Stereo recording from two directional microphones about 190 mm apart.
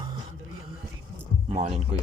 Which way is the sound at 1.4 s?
30° right (ahead or behind).